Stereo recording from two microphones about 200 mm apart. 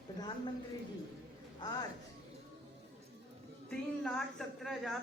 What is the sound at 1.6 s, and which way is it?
Speech, 20° left (ahead or behind).